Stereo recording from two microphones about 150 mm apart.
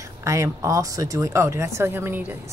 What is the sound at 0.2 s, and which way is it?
Speech, 20° right (ahead or behind).